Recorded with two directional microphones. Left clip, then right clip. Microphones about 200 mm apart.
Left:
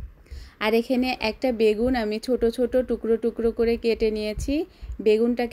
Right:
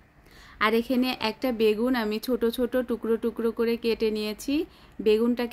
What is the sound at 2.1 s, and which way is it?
Speech, 5° left (ahead or behind).